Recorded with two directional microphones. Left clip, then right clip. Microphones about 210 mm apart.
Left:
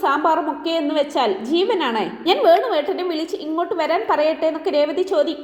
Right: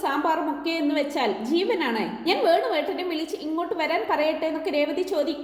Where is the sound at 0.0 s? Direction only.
15° left (ahead or behind).